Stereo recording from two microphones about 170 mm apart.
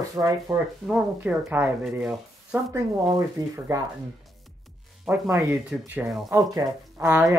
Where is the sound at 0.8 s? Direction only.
5° right (ahead or behind).